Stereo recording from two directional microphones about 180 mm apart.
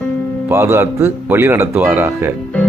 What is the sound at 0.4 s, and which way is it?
Speech, 15° right (ahead or behind).